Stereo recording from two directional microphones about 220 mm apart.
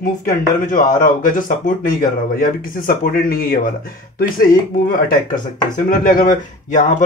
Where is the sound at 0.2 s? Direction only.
35° left (ahead or behind).